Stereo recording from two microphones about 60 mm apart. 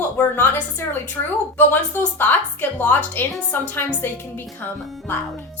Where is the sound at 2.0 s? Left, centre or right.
Left.